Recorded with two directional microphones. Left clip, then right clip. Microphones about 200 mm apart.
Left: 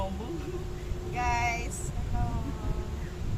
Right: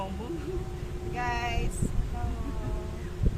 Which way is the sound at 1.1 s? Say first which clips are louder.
Left 2 dB; 20° left (ahead or behind).